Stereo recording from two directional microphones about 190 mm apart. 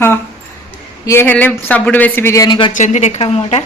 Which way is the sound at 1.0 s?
15° left (ahead or behind).